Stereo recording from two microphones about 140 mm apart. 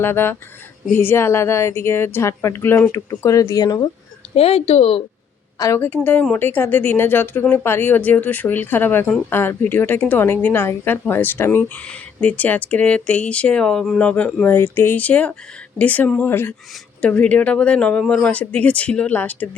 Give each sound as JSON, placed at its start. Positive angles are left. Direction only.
{"t": 0.0, "sound": "a woman's voice", "side_deg": 15}
{"t": 4.4, "sound": "speech", "side_deg": 45}
{"t": 5.5, "sound": "a woman's voice", "side_deg": 20}